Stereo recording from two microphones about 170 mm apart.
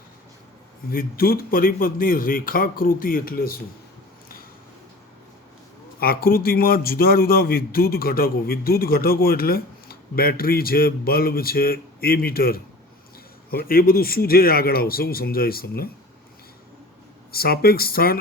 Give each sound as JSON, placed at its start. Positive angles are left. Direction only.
{"t": 0.9, "sound": "a man's voice", "side_deg": 60}
{"t": 6.0, "sound": "a man's voice", "side_deg": 60}
{"t": 17.3, "sound": "a man's voice", "side_deg": 65}